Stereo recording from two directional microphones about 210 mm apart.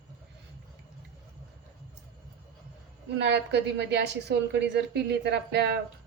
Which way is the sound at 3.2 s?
55° right (ahead or behind).